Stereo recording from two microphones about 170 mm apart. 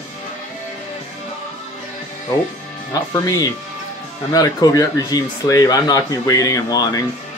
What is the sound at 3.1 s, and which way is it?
Speech, 20° left (ahead or behind).